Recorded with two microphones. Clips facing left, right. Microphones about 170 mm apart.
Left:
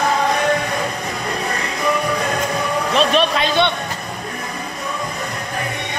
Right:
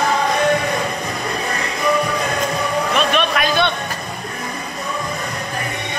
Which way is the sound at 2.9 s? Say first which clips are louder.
Left 4 dB; 30° left (ahead or behind).